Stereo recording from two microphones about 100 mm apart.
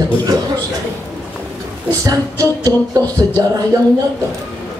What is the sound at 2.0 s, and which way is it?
Speech, 35° right (ahead or behind).